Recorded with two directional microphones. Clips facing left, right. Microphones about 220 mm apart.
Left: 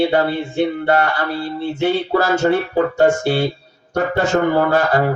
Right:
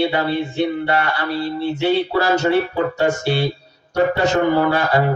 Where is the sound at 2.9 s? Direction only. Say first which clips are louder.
Left 5 dB; 45° left (ahead or behind).